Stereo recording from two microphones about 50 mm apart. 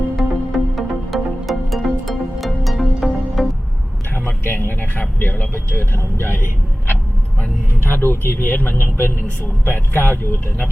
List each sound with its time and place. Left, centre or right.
0.2 s music: centre
4.4 s vehicle: left
7.9 s speech: left